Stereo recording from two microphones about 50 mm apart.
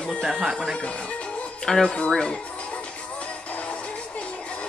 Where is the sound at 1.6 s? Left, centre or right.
Centre.